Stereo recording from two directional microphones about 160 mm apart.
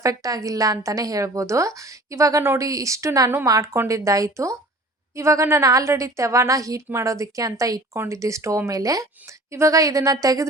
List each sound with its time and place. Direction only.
0.0 s a woman's voice: 20° right (ahead or behind)